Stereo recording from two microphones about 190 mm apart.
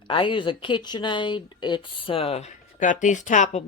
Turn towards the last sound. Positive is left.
turn(degrees=40)  # may be behind; listen again after turning